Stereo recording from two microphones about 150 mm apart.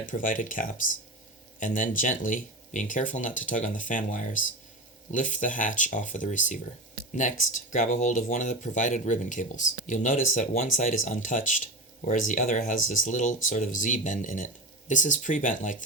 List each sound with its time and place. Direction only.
0.0 s speech: 60° left (ahead or behind)